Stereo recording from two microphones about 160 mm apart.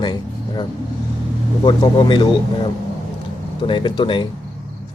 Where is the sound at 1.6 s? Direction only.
30° left (ahead or behind).